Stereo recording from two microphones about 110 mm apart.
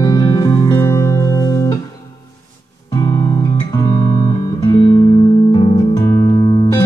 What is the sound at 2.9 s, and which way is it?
Music, 30° left (ahead or behind).